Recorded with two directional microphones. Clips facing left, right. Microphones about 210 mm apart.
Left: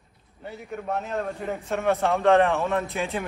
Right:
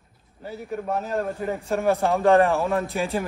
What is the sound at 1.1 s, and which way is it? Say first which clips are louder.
Speech: right 3 dB; centre (ahead or behind).